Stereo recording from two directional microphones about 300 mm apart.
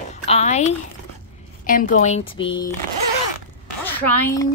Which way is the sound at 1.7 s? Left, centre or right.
Left.